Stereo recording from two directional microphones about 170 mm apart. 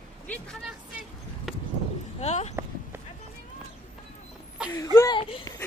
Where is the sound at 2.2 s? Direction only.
40° left (ahead or behind).